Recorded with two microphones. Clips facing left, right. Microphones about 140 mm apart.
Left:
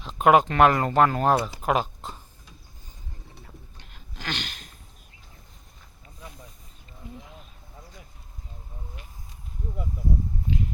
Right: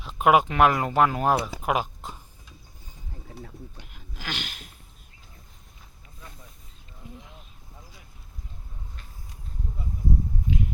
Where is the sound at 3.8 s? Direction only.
10° right (ahead or behind).